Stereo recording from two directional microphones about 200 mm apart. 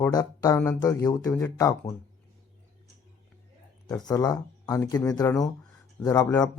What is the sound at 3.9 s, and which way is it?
Speech, 20° left (ahead or behind).